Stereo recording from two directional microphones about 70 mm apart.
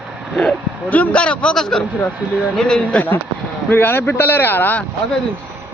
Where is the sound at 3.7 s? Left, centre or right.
Left.